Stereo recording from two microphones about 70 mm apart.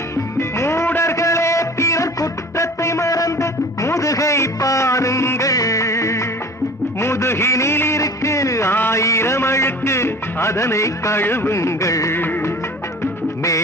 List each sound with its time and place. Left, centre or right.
0.3 s music: left
0.9 s a sound: left
1.1 s music: left
7.0 s a sound: left
8.0 s music: left
8.7 s music: left
9.0 s music: left
11.2 s speech: left
12.1 s music: left